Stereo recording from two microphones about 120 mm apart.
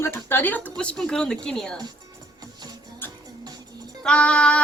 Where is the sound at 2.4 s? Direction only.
35° right (ahead or behind).